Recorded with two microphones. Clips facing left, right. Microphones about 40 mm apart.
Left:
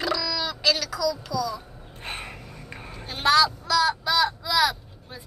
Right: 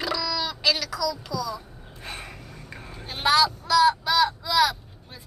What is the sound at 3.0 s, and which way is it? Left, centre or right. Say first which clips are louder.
Speech: left 1 dB; centre.